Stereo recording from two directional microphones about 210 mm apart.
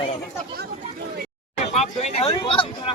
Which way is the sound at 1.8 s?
30° left (ahead or behind).